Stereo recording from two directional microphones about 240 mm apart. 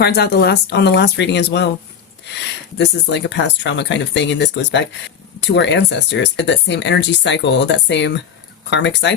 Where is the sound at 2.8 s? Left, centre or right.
Left.